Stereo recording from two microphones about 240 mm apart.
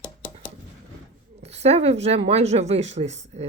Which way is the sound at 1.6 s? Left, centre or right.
Right.